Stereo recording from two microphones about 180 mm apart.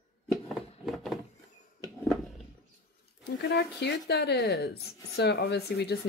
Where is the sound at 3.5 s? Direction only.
65° left (ahead or behind).